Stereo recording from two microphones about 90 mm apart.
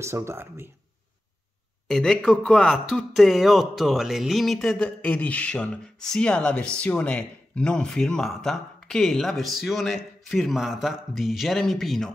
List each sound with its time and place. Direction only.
0.0 s speech: 30° right (ahead or behind)
1.9 s speech: 5° left (ahead or behind)
4.7 s speech: 15° left (ahead or behind)